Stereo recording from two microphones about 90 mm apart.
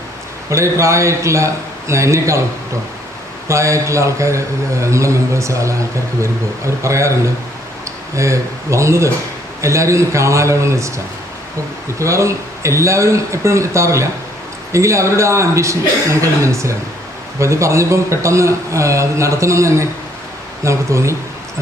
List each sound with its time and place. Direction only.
0.5 s speech: 35° right (ahead or behind)
3.5 s speech: 35° right (ahead or behind)
6.8 s speech: 35° right (ahead or behind)
8.1 s speech: 35° right (ahead or behind)